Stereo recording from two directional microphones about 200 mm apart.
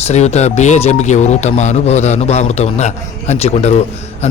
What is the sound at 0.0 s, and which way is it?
Speech, 35° left (ahead or behind).